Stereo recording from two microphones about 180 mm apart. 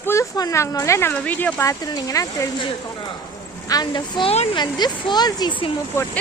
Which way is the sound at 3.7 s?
25° left (ahead or behind).